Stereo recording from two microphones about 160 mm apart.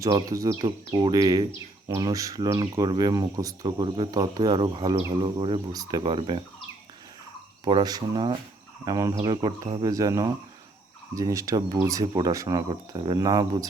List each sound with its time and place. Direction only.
0.0 s speech: 20° right (ahead or behind)
7.6 s speech: 25° right (ahead or behind)